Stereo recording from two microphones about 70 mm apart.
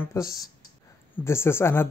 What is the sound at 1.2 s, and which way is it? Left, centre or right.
Speech, left.